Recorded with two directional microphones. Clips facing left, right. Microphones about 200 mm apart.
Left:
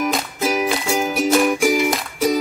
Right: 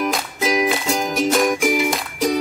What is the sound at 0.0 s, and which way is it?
Music, 5° left (ahead or behind).